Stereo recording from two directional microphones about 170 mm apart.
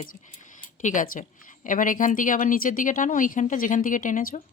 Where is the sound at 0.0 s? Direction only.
50° left (ahead or behind).